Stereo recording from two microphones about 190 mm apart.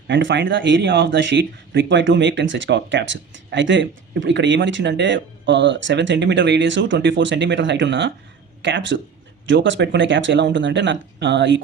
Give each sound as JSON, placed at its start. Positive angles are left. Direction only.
{"t": 0.1, "sound": "speech", "side_deg": -70}